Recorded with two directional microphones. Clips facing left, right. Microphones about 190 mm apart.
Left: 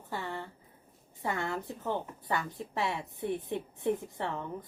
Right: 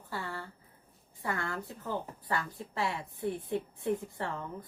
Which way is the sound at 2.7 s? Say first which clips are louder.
Left 1 dB; 20° left (ahead or behind).